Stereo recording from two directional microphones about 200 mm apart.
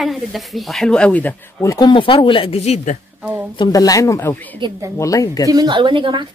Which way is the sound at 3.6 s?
20° left (ahead or behind).